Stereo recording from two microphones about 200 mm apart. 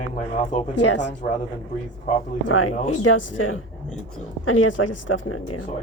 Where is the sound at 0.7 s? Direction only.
60° left (ahead or behind).